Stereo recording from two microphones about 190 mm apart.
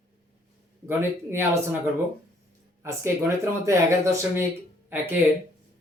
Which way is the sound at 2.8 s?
15° right (ahead or behind).